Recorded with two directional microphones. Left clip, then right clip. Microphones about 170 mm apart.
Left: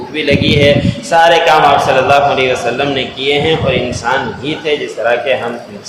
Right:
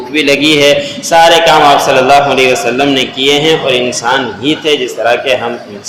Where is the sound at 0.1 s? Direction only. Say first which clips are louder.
Right 4 dB; 30° right (ahead or behind).